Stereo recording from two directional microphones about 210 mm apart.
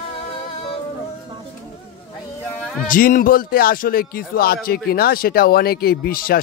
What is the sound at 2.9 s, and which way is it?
Speech, 40° left (ahead or behind).